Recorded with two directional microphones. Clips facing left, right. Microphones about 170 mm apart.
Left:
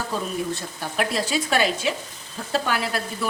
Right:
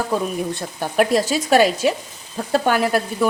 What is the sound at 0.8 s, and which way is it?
Speech, 45° right (ahead or behind).